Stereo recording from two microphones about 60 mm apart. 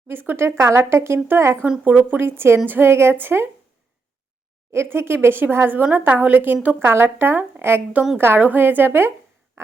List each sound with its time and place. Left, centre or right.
0.1 s a woman's voice: right
0.4 s a woman's voice: right
1.8 s a woman's voice: right
2.2 s a woman's voice: right
2.6 s a woman's voice: right
2.9 s a woman's voice: right
4.7 s a woman's voice: right